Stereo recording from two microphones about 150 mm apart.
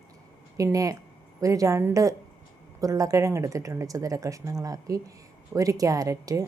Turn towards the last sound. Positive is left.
turn(degrees=-20)  # may be behind; listen again after turning